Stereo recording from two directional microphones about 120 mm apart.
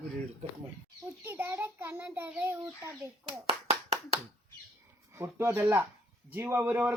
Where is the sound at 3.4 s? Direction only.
55° right (ahead or behind).